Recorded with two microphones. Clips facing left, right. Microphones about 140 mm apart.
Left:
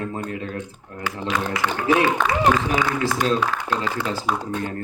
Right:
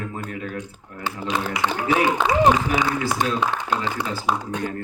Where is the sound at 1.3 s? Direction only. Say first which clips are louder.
Even; 20° right (ahead or behind).